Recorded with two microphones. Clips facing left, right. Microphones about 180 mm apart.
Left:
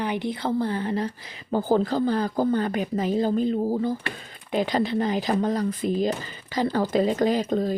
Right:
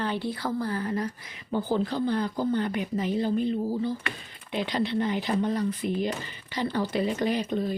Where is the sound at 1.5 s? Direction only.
45° left (ahead or behind).